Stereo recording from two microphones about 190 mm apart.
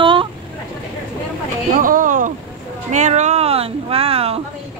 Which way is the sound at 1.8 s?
45° right (ahead or behind).